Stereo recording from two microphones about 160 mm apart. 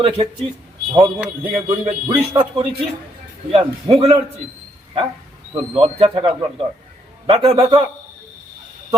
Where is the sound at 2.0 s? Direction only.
30° right (ahead or behind).